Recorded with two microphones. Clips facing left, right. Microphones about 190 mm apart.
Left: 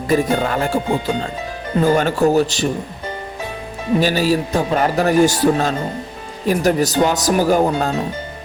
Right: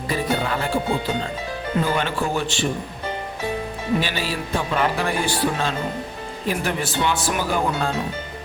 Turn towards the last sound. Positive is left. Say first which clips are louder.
# left 7 dB
turn(degrees=40)  # may be behind; listen again after turning